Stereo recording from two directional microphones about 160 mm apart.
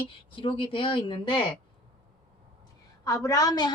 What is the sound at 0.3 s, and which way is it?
Speech, 35° left (ahead or behind).